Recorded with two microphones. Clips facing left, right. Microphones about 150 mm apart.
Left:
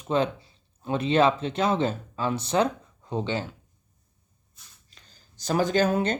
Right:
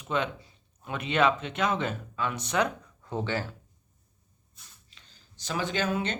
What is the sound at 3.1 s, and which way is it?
Speech, 20° left (ahead or behind).